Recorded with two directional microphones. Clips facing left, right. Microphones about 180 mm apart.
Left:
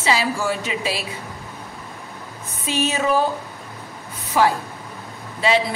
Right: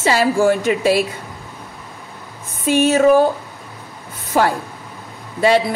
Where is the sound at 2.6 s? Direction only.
50° right (ahead or behind).